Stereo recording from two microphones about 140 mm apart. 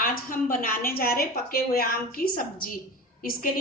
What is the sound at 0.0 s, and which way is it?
A woman's voice, 80° left.